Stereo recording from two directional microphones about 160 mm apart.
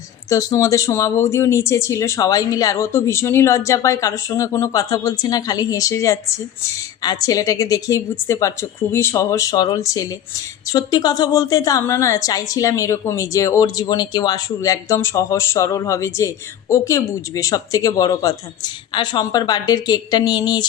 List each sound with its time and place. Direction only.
0.3 s a woman's voice: 20° left (ahead or behind)